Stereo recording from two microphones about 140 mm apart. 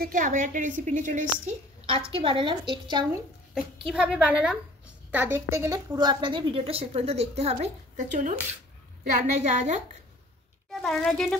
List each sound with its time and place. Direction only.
0.0 s a woman's voice: 70° right (ahead or behind)
1.9 s a woman's voice: 40° right (ahead or behind)
3.8 s a woman's voice: 10° right (ahead or behind); by 9.8 s 55° right (ahead or behind)
10.7 s speech: 5° left (ahead or behind)